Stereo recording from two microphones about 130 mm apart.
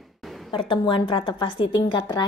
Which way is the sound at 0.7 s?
40° left (ahead or behind).